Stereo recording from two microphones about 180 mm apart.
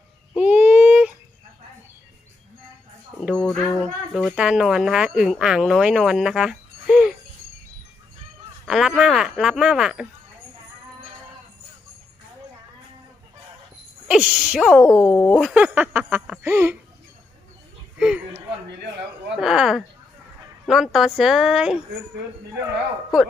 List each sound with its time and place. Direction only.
0.3 s a sound: 10° right (ahead or behind)
3.3 s speech: 5° left (ahead or behind)
8.6 s speech: centre (ahead or behind)
14.1 s a sound: 5° right (ahead or behind)
14.9 s speech: 15° left (ahead or behind)
15.2 s speech: centre (ahead or behind)
18.0 s speech: 5° right (ahead or behind)